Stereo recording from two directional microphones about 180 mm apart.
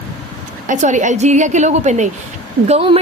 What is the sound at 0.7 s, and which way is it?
A woman's voice, 40° right (ahead or behind).